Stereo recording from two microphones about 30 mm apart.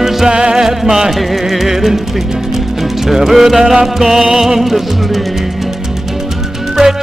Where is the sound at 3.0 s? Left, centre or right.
Centre.